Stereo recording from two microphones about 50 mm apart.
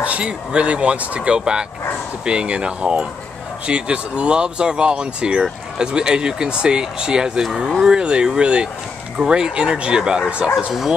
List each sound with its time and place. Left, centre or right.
0.0 s speech: right; by 11.0 s centre